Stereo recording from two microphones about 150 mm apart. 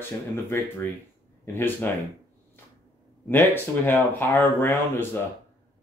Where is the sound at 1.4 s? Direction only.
15° left (ahead or behind).